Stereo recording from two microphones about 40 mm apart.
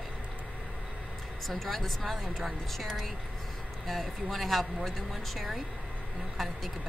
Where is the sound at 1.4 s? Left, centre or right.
Centre.